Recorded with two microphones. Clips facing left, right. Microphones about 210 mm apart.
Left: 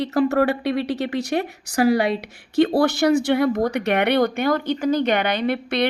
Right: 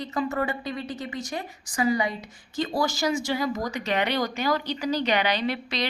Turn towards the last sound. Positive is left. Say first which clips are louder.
# left 6 dB
turn(degrees=55)  # may be behind; listen again after turning